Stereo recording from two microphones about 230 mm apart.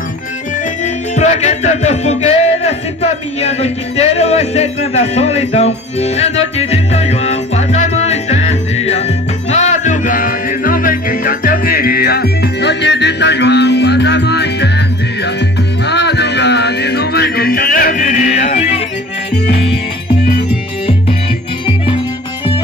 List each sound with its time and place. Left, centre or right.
1.1 s music: left
15.9 s music: left
21.6 s music: left